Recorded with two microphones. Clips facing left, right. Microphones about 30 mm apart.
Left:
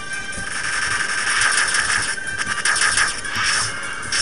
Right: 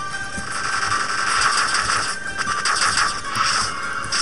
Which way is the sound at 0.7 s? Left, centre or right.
Left.